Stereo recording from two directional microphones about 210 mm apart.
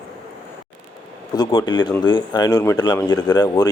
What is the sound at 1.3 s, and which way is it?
A man's voice, 20° left (ahead or behind).